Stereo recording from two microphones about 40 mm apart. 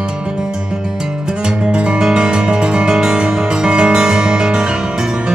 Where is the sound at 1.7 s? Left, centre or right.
Right.